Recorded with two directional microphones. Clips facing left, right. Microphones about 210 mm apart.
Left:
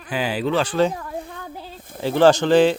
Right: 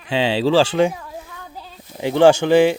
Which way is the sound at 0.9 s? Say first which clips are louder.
Left 4 dB; 55° left (ahead or behind).